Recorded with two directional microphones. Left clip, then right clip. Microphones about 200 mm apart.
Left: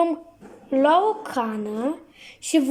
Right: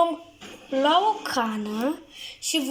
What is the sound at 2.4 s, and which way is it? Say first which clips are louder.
Speech: left 5 dB; 20° left (ahead or behind).